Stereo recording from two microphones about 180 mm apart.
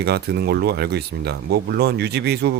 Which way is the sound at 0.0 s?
65° right (ahead or behind).